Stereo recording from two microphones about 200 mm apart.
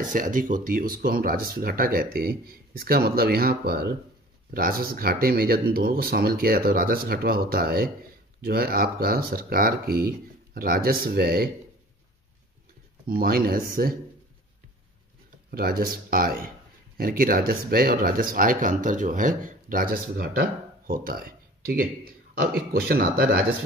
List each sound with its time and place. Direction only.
0.0 s speech: 40° right (ahead or behind)
13.0 s speech: 45° right (ahead or behind)
15.5 s speech: 50° right (ahead or behind)